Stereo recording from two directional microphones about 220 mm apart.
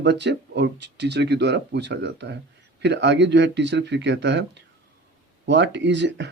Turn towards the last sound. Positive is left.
turn(degrees=-50)  # may be behind; listen again after turning